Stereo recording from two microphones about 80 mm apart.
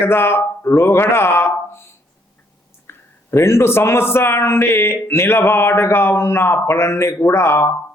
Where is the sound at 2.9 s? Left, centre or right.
Left.